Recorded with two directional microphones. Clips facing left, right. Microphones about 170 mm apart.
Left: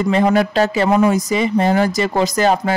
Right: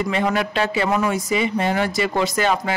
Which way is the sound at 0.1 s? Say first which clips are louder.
Left 6 dB; 35° left (ahead or behind).